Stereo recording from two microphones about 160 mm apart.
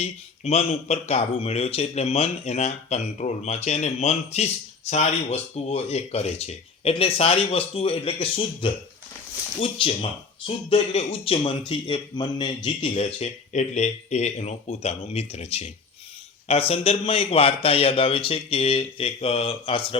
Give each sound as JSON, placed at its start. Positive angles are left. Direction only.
{"t": 0.0, "sound": "a man's voice", "side_deg": 45}
{"t": 12.9, "sound": "a man's voice", "side_deg": 40}